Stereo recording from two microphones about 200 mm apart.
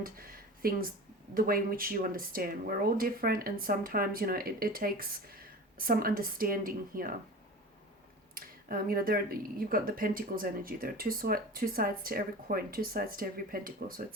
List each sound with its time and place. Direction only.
0.0 s speech: 45° right (ahead or behind)
8.4 s speech: 45° right (ahead or behind)